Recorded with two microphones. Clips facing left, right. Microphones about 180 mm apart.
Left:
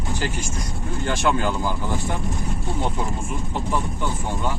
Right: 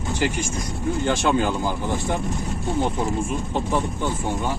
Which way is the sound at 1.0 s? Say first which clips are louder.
Right 1 dB; 20° right (ahead or behind).